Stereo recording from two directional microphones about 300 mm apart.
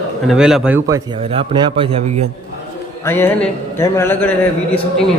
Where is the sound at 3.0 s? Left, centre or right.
Centre.